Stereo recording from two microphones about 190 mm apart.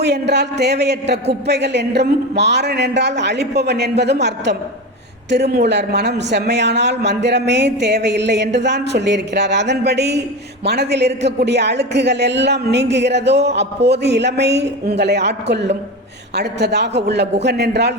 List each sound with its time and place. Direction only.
0.0 s speech: 60° right (ahead or behind)